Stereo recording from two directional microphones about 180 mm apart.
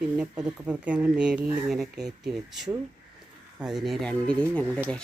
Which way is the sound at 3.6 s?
5° right (ahead or behind).